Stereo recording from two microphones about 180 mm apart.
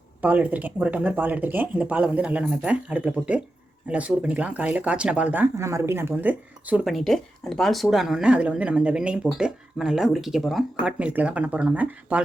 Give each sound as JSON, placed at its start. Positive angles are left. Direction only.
{"t": 0.2, "sound": "speech", "side_deg": -10}